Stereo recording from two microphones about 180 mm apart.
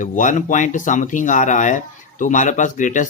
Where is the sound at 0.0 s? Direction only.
45° left (ahead or behind).